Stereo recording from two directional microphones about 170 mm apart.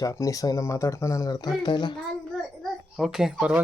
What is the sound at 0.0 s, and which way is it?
Speech, 20° left (ahead or behind).